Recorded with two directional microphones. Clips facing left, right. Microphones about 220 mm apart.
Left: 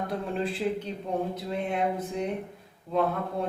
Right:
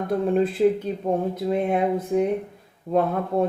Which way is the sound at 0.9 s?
50° right (ahead or behind).